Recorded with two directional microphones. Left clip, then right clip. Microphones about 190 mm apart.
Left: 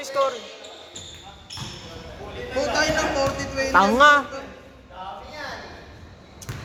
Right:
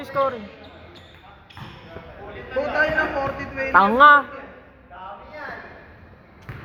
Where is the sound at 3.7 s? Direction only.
35° right (ahead or behind).